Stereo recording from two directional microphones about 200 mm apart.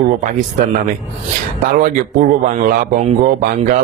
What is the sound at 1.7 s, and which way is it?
Speech, 45° right (ahead or behind).